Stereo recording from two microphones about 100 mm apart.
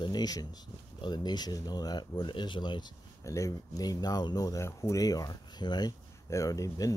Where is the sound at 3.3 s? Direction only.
35° left (ahead or behind).